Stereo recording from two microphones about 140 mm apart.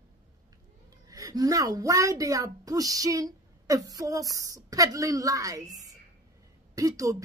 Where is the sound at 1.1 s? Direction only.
25° right (ahead or behind).